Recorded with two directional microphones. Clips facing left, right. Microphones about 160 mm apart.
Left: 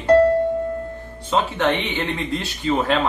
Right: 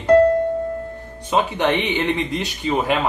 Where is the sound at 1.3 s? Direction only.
15° right (ahead or behind).